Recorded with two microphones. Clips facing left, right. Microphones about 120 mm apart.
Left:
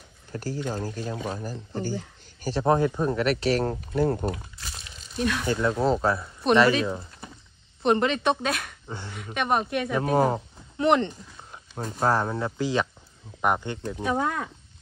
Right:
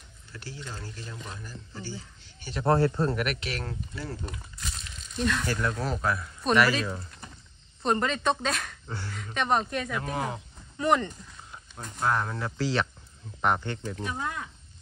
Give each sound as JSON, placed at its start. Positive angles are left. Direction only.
{"t": 0.3, "sound": "speech", "side_deg": 45}
{"t": 2.6, "sound": "a woman's voice", "side_deg": 15}
{"t": 3.2, "sound": "speech", "side_deg": 35}
{"t": 3.7, "sound": "speech", "side_deg": 55}
{"t": 4.6, "sound": "a sound", "side_deg": 5}
{"t": 5.5, "sound": "a woman's voice", "side_deg": 25}
{"t": 8.8, "sound": "speech", "side_deg": 20}
{"t": 9.1, "sound": "a woman's voice", "side_deg": 10}
{"t": 9.8, "sound": "speech", "side_deg": 35}
{"t": 10.9, "sound": "a woman's voice", "side_deg": 25}